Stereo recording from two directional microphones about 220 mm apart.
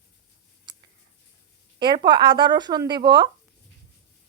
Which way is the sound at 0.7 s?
20° right (ahead or behind).